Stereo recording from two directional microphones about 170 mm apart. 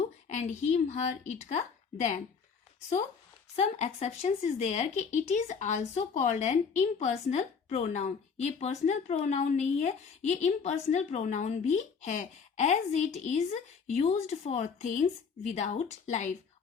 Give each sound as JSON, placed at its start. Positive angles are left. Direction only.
{"t": 0.0, "sound": "speech", "side_deg": 45}
{"t": 3.5, "sound": "speech", "side_deg": 40}